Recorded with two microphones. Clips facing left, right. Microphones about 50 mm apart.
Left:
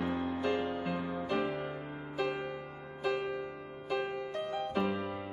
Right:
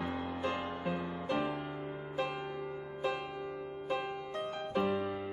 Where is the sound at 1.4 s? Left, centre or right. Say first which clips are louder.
Left 1 dB; centre.